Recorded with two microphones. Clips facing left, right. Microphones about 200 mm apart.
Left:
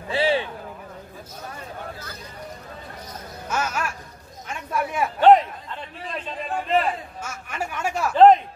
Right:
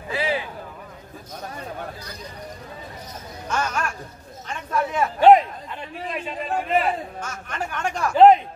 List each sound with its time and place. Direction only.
0.1 s a sound: 30° left (ahead or behind)
3.4 s speech: 5° left (ahead or behind)
5.2 s a man's voice: 10° right (ahead or behind)
7.2 s speech: 10° left (ahead or behind)
8.1 s a man's voice: 10° right (ahead or behind)